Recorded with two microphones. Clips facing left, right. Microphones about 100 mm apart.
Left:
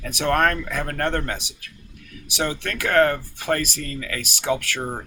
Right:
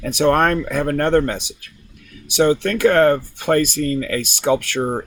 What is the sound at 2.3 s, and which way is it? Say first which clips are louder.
Speech: right 10 dB; 25° right (ahead or behind).